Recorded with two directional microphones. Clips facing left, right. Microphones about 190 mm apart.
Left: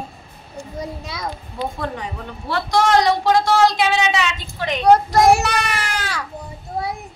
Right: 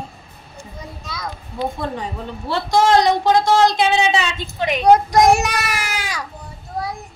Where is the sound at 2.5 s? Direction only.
25° right (ahead or behind).